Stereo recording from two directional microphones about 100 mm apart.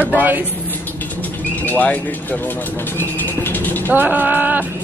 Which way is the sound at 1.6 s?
15° left (ahead or behind).